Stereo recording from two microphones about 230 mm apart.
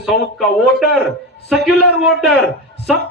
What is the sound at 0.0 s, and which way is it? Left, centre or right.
A man's voice, centre.